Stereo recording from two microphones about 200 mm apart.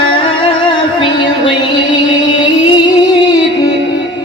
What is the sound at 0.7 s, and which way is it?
Music, 25° left (ahead or behind).